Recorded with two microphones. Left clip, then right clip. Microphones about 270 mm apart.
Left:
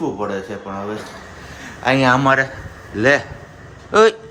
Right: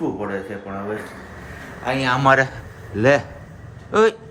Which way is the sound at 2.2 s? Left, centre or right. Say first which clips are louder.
Even; centre.